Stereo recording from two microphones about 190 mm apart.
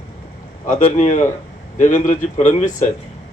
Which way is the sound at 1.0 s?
40° left (ahead or behind).